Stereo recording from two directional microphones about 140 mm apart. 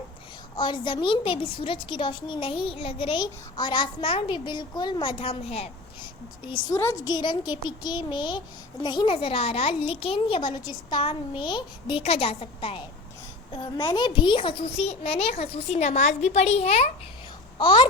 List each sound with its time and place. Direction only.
0.5 s a woman's voice: 35° left (ahead or behind)
6.7 s a woman's voice: 20° left (ahead or behind)
7.1 s a woman's voice: 30° left (ahead or behind); by 16.9 s 50° left (ahead or behind)
17.6 s a woman's voice: 35° left (ahead or behind)